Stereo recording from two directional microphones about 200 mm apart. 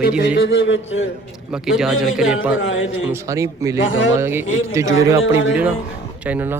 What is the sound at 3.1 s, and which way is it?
Speech, 15° right (ahead or behind).